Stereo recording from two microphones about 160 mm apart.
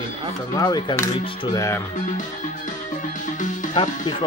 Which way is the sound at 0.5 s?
25° left (ahead or behind).